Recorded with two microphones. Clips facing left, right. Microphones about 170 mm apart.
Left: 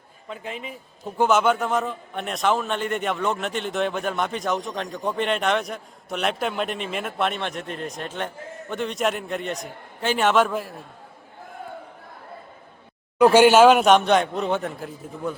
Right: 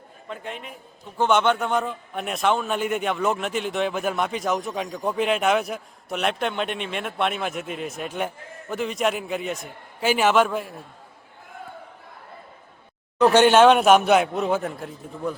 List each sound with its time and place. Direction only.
0.3 s a man's voice: centre (ahead or behind)
13.1 s a man's voice: 10° left (ahead or behind)